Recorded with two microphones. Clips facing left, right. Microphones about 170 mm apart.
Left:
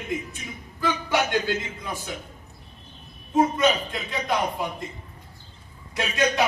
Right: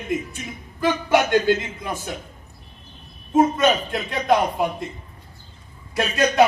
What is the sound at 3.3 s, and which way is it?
A man's voice, 60° right (ahead or behind).